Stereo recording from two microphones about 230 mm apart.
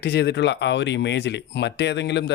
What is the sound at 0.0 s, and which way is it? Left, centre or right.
Speech, left.